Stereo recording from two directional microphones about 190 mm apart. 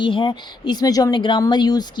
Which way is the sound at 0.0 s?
25° left (ahead or behind).